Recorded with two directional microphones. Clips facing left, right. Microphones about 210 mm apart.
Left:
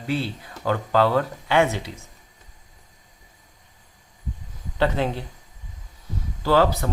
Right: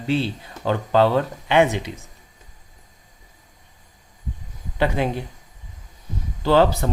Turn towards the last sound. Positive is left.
turn(degrees=-20)  # may be behind; listen again after turning